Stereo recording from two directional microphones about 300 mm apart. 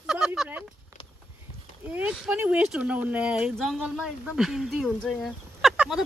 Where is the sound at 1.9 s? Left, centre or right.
Centre.